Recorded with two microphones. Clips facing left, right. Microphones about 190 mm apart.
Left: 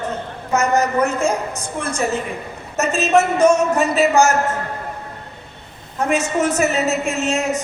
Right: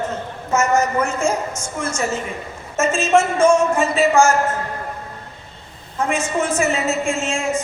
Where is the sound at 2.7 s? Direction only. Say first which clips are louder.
Even; 40° left (ahead or behind).